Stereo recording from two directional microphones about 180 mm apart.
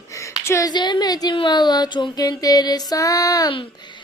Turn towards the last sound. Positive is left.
turn(degrees=20)  # may be behind; listen again after turning